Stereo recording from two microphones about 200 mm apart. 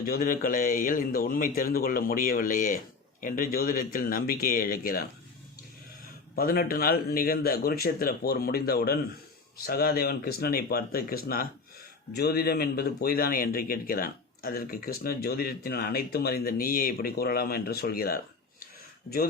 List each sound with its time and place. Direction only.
0.0 s a man's voice: 45° left (ahead or behind)
6.3 s a man's voice: 45° left (ahead or behind)